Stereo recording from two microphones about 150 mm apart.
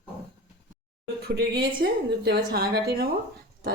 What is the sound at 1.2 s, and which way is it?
Speech, 90° right.